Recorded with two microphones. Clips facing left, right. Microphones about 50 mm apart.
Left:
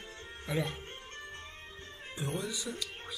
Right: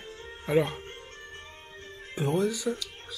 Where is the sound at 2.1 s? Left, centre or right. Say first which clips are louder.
Right 10 dB; right.